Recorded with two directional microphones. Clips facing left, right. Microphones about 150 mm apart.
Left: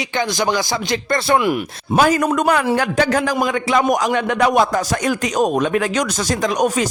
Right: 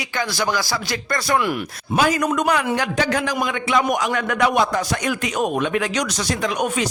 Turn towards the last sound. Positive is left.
turn(degrees=40)  # may be behind; listen again after turning